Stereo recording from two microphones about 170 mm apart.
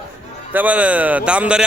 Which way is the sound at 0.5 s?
10° right (ahead or behind).